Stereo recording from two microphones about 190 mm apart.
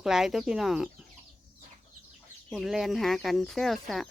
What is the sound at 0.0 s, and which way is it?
Speech, centre (ahead or behind).